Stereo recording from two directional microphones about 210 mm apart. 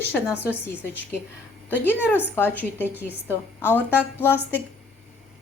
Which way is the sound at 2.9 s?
10° right (ahead or behind).